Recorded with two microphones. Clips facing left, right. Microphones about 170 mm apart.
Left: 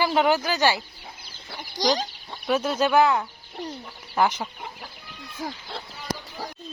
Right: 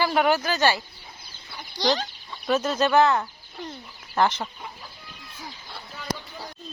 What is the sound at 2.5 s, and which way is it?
Speech, 10° left (ahead or behind).